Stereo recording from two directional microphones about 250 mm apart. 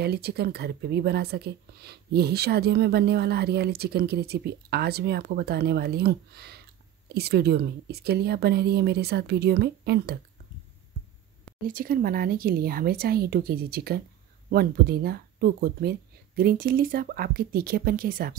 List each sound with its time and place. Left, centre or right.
0.0 s a woman's voice: right
11.6 s a woman's voice: right